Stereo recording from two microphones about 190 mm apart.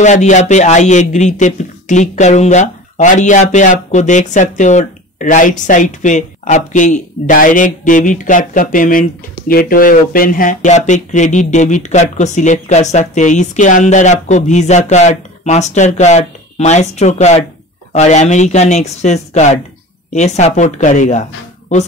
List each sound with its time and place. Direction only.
0.0 s speech: 40° left (ahead or behind)